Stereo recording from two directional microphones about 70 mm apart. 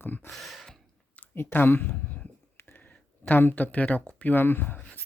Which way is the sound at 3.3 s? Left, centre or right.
Left.